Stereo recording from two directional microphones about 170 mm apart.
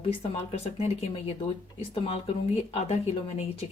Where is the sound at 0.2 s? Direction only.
35° left (ahead or behind).